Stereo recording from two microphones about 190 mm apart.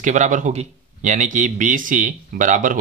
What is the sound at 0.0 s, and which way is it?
A man's voice, 40° right (ahead or behind).